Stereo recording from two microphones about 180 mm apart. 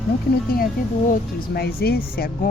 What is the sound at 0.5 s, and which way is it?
Speech, 55° left (ahead or behind).